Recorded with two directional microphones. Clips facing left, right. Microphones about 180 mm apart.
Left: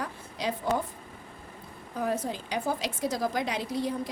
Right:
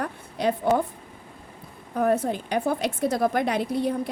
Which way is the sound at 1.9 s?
60° right (ahead or behind).